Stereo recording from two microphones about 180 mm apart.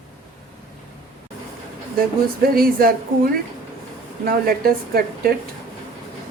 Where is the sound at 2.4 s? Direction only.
55° right (ahead or behind).